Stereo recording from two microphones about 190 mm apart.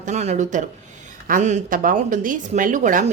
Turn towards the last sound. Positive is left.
turn(degrees=-40)  # may be behind; listen again after turning